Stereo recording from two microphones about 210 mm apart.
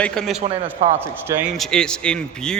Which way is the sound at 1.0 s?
10° right (ahead or behind).